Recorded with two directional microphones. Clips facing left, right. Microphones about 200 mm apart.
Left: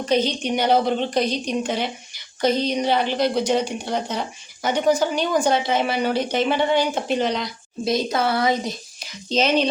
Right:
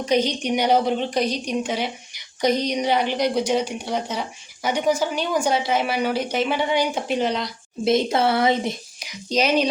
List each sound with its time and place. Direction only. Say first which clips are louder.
0.0 s a woman's voice: even; 15° right (ahead or behind)
7.9 s a woman's voice: right 2 dB; 25° right (ahead or behind)
9.0 s speech: left 1 dB; 10° right (ahead or behind)